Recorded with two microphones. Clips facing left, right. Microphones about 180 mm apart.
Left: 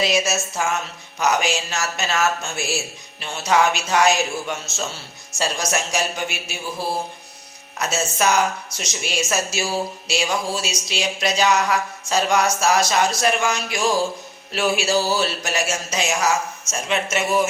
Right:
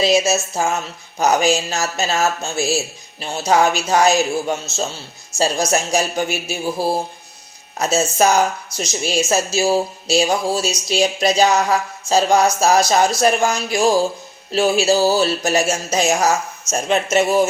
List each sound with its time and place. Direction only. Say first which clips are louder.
0.0 s speech: right 5 dB; 30° right (ahead or behind)
7.8 s speech: right 6 dB; 30° right (ahead or behind)